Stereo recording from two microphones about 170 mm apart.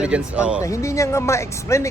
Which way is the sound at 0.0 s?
5° right (ahead or behind).